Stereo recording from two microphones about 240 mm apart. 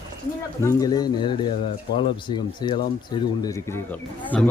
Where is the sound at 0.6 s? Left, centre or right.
Centre.